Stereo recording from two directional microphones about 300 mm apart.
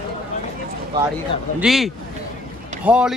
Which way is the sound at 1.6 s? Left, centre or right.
Centre.